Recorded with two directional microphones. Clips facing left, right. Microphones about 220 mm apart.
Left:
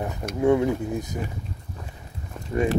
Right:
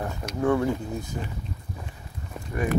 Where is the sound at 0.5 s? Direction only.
20° left (ahead or behind).